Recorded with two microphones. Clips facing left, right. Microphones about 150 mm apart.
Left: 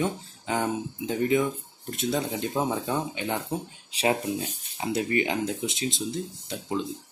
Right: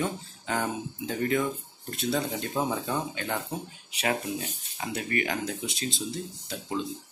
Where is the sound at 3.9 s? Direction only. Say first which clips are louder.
Left 4 dB; 30° left (ahead or behind).